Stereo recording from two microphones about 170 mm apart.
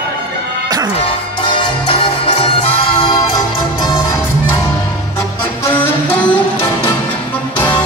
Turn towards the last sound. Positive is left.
turn(degrees=10)  # may be behind; listen again after turning